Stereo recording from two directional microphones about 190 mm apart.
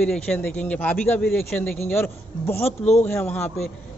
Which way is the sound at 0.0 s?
5° left (ahead or behind).